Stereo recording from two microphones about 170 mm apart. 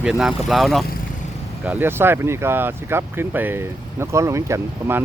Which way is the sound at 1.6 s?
10° right (ahead or behind).